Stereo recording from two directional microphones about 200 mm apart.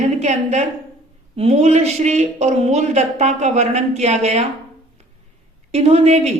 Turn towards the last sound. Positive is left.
turn(degrees=-30)  # may be behind; listen again after turning